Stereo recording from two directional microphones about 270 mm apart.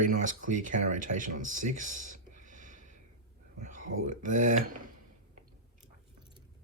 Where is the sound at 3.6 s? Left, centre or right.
Right.